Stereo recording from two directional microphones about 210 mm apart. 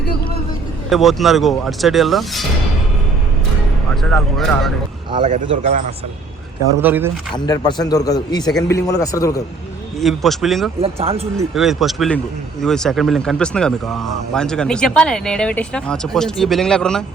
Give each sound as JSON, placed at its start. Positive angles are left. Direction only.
{"t": 0.9, "sound": "speech", "side_deg": 0}
{"t": 4.1, "sound": "speech", "side_deg": 0}
{"t": 5.2, "sound": "a man's voice", "side_deg": -35}
{"t": 6.8, "sound": "speech", "side_deg": -10}
{"t": 7.3, "sound": "a man's voice", "side_deg": 20}
{"t": 10.0, "sound": "speech", "side_deg": 0}
{"t": 10.8, "sound": "speech", "side_deg": -25}
{"t": 11.5, "sound": "speech", "side_deg": 0}